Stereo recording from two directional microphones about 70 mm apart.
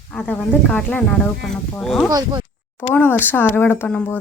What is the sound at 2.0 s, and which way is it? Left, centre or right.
Speech, right.